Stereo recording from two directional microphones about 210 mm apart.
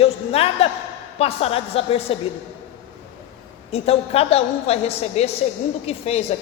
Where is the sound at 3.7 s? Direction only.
30° left (ahead or behind).